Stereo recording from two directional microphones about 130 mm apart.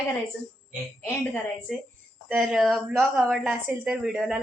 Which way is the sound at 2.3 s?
5° right (ahead or behind).